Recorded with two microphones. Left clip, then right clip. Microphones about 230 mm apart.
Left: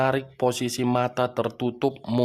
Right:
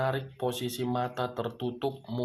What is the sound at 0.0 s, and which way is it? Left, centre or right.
Speech, left.